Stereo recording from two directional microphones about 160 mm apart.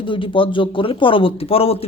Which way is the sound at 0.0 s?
30° left (ahead or behind).